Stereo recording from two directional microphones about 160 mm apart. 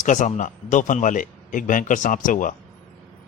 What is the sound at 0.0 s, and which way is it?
A man's voice, 50° left (ahead or behind).